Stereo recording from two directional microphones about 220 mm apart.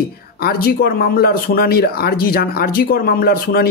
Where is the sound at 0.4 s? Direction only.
45° left (ahead or behind).